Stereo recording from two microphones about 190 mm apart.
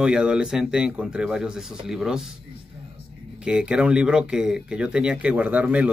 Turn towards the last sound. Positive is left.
turn(degrees=-5)  # may be behind; listen again after turning